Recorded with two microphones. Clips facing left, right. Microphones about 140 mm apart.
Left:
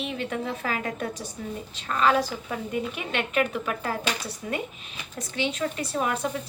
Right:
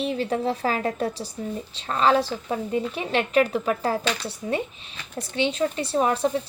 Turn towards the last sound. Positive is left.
turn(degrees=-30)  # may be behind; listen again after turning